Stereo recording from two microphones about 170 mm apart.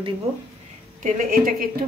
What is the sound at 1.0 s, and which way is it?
Speech, 55° right (ahead or behind).